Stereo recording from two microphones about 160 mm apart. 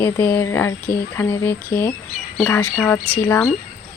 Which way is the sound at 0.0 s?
15° left (ahead or behind).